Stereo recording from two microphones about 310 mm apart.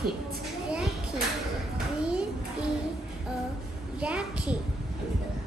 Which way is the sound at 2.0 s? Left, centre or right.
Centre.